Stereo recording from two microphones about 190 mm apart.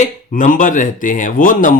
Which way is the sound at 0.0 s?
40° left (ahead or behind).